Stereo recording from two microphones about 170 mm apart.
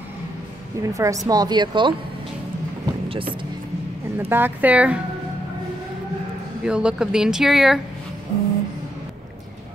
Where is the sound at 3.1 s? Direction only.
30° right (ahead or behind).